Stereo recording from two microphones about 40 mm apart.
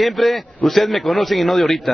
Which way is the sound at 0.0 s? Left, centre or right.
Centre.